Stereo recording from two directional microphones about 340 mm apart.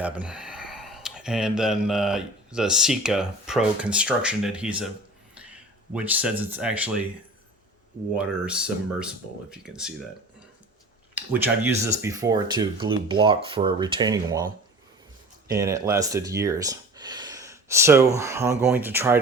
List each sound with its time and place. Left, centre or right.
0.0 s speech: centre
8.1 s speech: centre
11.3 s speech: centre